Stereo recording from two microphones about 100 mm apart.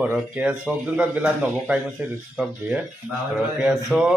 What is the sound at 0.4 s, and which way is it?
Speech, 15° right (ahead or behind).